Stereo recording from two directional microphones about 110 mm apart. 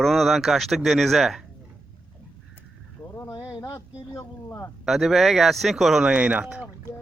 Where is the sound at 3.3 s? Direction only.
35° left (ahead or behind).